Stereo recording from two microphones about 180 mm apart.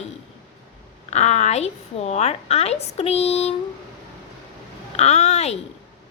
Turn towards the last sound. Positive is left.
turn(degrees=40)  # may be behind; listen again after turning